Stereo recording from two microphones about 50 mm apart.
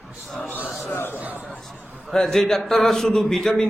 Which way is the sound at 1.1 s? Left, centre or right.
Right.